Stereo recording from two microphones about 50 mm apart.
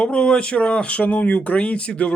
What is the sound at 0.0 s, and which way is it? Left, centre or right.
Speech, left.